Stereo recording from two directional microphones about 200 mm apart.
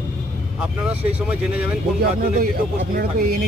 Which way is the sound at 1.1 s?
5° right (ahead or behind).